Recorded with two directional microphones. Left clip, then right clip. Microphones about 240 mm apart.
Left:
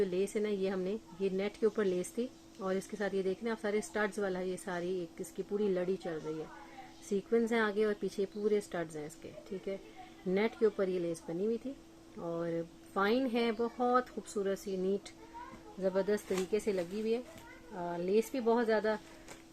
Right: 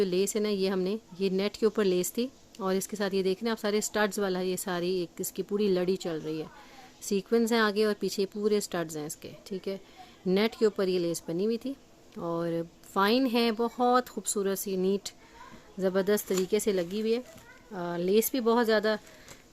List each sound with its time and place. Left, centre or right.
0.0 s speech: right